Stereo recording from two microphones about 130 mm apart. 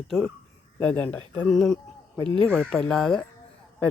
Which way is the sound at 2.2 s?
40° right (ahead or behind).